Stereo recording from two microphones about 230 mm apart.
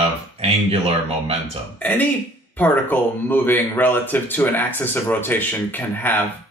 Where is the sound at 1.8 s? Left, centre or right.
Centre.